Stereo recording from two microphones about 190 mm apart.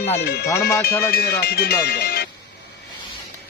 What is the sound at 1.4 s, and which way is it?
Speech, 55° left (ahead or behind).